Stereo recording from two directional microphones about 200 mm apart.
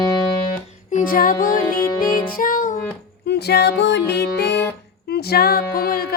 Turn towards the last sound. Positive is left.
turn(degrees=50)  # may be behind; listen again after turning